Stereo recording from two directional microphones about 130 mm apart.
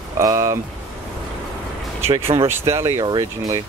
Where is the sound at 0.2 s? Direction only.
25° right (ahead or behind).